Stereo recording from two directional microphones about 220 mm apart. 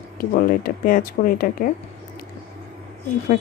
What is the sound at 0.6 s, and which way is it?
Speech, 40° left (ahead or behind).